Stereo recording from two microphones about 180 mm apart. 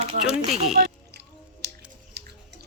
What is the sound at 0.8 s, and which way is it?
Music, 65° right (ahead or behind).